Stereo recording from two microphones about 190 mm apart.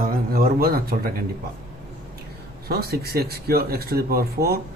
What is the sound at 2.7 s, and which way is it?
Speech, 55° right (ahead or behind).